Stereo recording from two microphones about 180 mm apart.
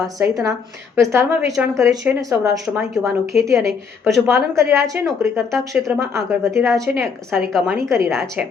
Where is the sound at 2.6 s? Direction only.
Centre (ahead or behind).